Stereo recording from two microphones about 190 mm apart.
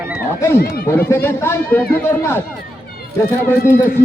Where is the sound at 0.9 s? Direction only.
10° left (ahead or behind).